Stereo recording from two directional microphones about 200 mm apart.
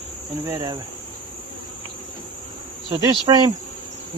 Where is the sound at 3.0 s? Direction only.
20° right (ahead or behind).